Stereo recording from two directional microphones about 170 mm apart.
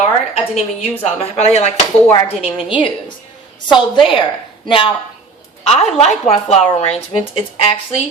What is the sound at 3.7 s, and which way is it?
A woman's voice, 30° left (ahead or behind).